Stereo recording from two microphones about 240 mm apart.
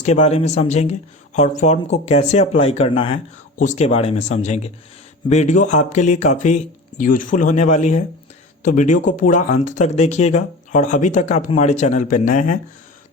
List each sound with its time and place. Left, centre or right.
0.0 s speech: left